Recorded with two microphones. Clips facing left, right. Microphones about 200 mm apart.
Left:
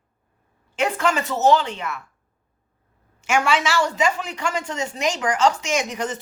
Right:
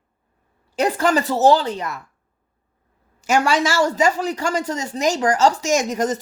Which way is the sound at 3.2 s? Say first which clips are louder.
Right 3 dB; 40° right (ahead or behind).